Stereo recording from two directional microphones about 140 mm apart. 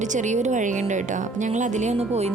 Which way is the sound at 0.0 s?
60° right (ahead or behind).